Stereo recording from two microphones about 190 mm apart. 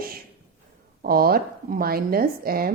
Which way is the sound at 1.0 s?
50° right (ahead or behind).